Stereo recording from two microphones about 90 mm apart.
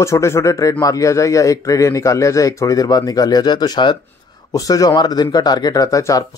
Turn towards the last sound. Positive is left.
turn(degrees=35)  # may be behind; listen again after turning